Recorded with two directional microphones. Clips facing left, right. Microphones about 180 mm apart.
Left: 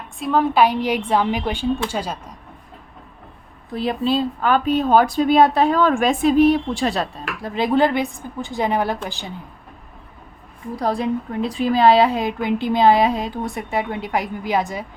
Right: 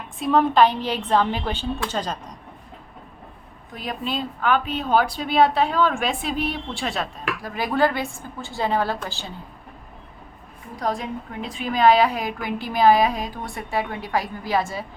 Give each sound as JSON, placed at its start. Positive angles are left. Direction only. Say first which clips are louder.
{"t": 0.2, "sound": "a woman's voice", "louder": "even", "side_deg": 0}
{"t": 3.7, "sound": "speech", "louder": "left 8 dB", "side_deg": 30}
{"t": 7.4, "sound": "a woman's voice", "louder": "left 4 dB", "side_deg": 25}
{"t": 10.8, "sound": "a woman's voice", "louder": "left 5 dB", "side_deg": 35}